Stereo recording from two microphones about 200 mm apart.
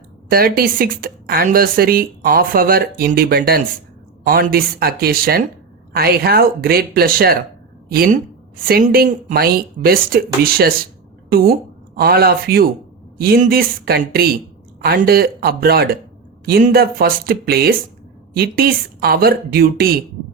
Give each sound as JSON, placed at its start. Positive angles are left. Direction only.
{"t": 0.3, "sound": "a woman's voice", "side_deg": -50}